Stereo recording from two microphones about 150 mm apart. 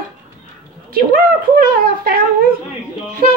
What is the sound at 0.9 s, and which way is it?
A woman's voice, 80° right.